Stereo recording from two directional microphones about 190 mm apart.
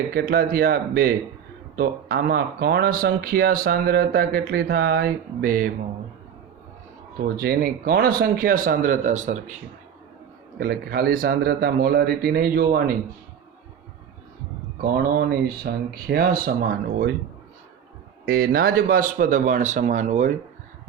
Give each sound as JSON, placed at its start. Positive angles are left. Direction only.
{"t": 0.1, "sound": "speech", "side_deg": -50}
{"t": 7.3, "sound": "speech", "side_deg": -55}
{"t": 10.6, "sound": "speech", "side_deg": -55}
{"t": 14.8, "sound": "speech", "side_deg": -50}
{"t": 18.3, "sound": "speech", "side_deg": -50}